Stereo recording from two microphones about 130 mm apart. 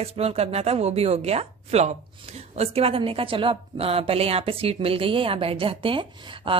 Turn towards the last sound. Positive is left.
turn(degrees=-45)  # may be behind; listen again after turning